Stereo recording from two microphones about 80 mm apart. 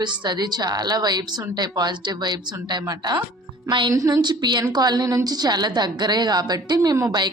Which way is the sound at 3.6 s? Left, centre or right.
Right.